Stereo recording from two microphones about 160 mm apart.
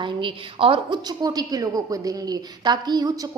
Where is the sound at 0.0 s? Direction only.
30° right (ahead or behind).